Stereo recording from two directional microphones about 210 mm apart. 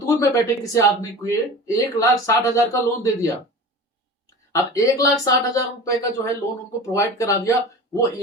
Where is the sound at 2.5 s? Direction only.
15° left (ahead or behind).